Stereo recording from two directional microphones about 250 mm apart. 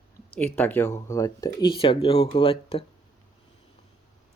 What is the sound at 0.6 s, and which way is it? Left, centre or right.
Speech, centre.